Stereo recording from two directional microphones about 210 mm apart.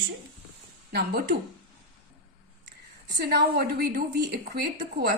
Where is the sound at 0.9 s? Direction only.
50° right (ahead or behind).